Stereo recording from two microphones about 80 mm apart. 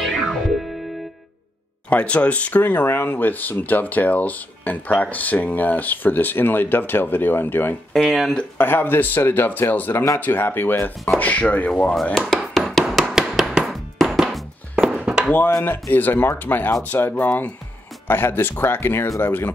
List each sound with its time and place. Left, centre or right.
0.0 s music: centre
1.9 s speech: centre
7.9 s speech: centre
8.5 s speech: left
11.9 s speech: centre
12.7 s music: centre
14.8 s chop: centre
15.6 s speech: left
19.0 s speech: left